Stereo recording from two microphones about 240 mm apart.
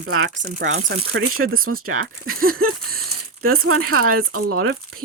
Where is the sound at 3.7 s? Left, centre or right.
Right.